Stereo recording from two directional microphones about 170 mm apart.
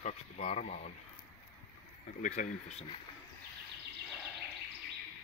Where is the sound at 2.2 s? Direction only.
45° left (ahead or behind).